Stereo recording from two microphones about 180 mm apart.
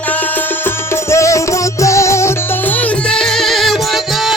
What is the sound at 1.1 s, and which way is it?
Music, 15° left (ahead or behind).